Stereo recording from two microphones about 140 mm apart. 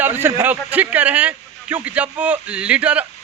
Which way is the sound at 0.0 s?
15° right (ahead or behind).